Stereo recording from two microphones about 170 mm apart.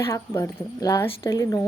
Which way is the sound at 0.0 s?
15° left (ahead or behind).